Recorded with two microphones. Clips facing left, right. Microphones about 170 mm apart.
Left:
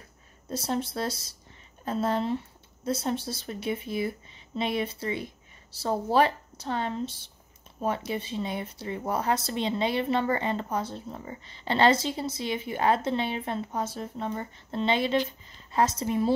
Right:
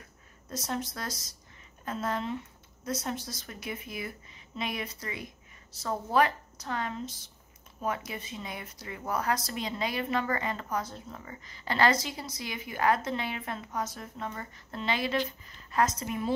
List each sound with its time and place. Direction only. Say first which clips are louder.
0.5 s speech: left 5 dB; 30° left (ahead or behind)